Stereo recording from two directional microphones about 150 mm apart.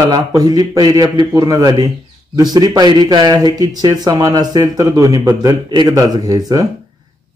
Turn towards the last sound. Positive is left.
turn(degrees=-25)  # may be behind; listen again after turning